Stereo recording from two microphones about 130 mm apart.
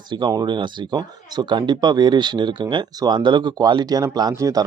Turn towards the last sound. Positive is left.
turn(degrees=-25)  # may be behind; listen again after turning